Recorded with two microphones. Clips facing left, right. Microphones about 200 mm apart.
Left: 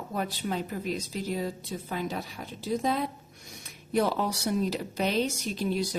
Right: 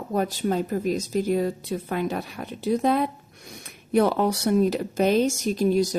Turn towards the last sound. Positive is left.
turn(degrees=-45)  # may be behind; listen again after turning